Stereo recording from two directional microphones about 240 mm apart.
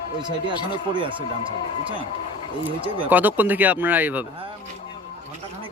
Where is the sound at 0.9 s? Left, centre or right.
Right.